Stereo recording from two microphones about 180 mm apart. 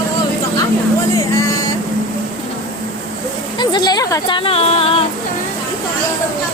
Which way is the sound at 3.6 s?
25° left (ahead or behind).